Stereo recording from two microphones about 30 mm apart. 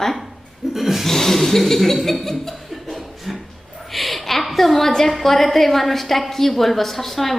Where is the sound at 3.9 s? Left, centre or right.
Centre.